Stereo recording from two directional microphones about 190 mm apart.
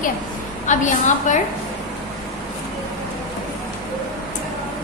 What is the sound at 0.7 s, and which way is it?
Speech, 40° left (ahead or behind).